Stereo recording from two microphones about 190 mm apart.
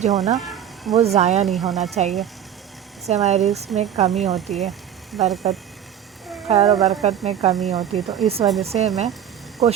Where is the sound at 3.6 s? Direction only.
Centre (ahead or behind).